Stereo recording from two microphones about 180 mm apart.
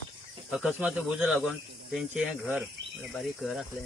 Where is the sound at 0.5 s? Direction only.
10° right (ahead or behind).